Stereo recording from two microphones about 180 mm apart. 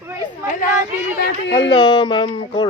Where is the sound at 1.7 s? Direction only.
25° left (ahead or behind).